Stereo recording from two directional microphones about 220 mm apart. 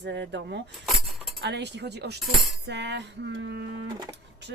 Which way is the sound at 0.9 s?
Centre (ahead or behind).